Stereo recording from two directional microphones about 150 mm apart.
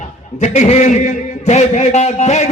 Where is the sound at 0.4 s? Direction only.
50° left (ahead or behind).